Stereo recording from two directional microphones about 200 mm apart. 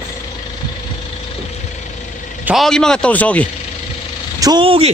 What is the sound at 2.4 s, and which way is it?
A man's voice, centre (ahead or behind).